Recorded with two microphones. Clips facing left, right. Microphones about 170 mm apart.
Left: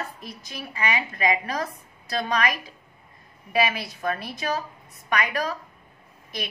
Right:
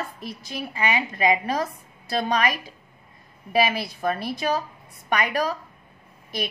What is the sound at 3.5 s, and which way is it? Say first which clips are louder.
A woman's voice: right 2 dB; 30° right (ahead or behind).